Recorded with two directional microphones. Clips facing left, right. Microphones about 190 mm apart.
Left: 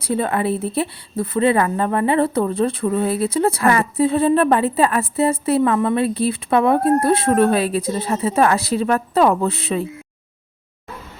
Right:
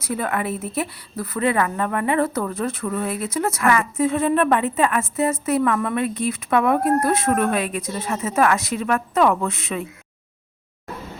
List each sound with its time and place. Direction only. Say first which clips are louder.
0.0 s a woman's voice: left 4 dB; 30° left (ahead or behind)